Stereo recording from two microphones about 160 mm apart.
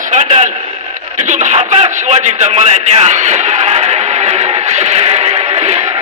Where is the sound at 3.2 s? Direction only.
45° right (ahead or behind).